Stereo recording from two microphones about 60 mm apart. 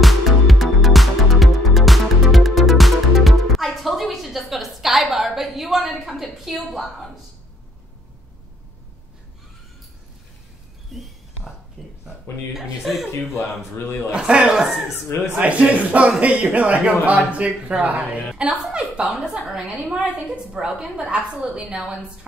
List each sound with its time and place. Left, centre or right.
0.0 s music: centre
10.9 s a sound: centre
12.8 s speech: centre
14.1 s a woman's voice: centre
15.3 s a woman's voice: right
19.0 s speech: centre
19.5 s a woman's voice: centre
21.5 s a woman's voice: centre